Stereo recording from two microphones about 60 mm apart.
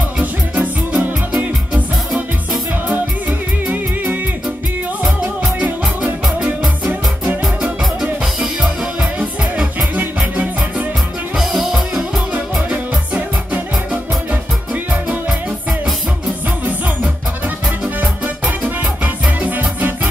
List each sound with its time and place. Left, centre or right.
0.2 s music: right
5.2 s music: centre
6.9 s music: right
8.0 s music: centre
9.9 s music: right
11.3 s music: centre
12.6 s music: right
14.9 s music: centre
19.4 s music: right